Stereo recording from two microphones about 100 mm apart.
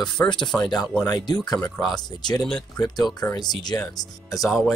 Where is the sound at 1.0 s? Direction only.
40° left (ahead or behind).